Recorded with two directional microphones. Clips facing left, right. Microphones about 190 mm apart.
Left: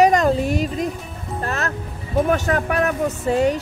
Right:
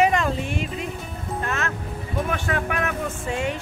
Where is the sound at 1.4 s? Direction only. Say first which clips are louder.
Left 3 dB; 35° left (ahead or behind).